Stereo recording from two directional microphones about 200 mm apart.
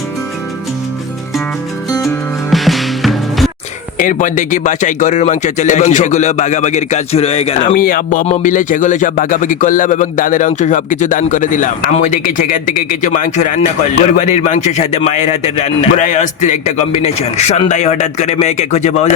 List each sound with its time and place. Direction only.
2.5 s music: centre (ahead or behind)
3.9 s speech: 40° left (ahead or behind)
7.9 s speech: 45° left (ahead or behind)